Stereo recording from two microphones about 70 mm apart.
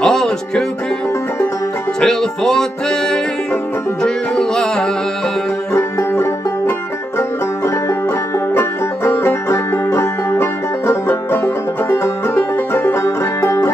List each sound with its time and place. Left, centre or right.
0.0 s music: centre
2.0 s music: centre
5.7 s music: left
8.5 s music: left